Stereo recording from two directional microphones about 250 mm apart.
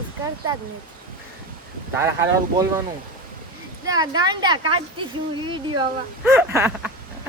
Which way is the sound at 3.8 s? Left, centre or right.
Centre.